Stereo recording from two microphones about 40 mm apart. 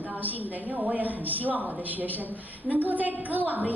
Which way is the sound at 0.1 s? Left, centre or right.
Right.